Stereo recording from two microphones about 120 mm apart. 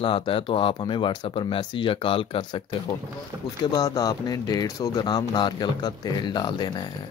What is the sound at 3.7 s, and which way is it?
Speech, 35° left (ahead or behind).